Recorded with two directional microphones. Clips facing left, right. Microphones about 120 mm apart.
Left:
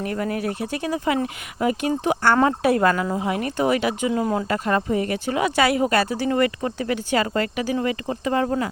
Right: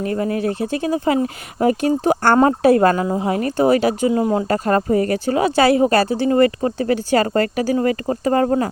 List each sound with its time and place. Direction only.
0.0 s speech: 30° right (ahead or behind)
4.2 s speech: 20° right (ahead or behind)
4.4 s speech: 40° right (ahead or behind)